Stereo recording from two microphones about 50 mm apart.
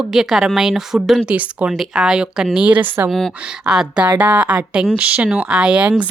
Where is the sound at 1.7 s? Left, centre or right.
Centre.